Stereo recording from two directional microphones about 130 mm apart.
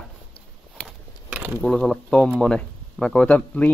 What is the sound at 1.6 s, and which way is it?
Speech, 5° left (ahead or behind).